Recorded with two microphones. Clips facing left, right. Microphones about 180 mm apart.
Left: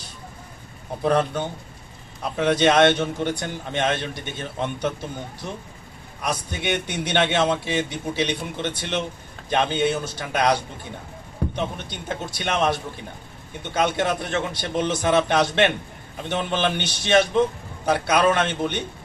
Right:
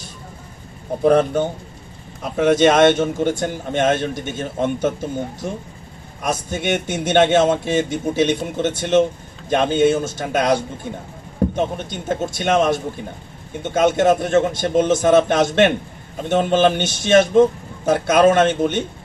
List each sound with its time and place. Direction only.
1.0 s a man's voice: 50° right (ahead or behind)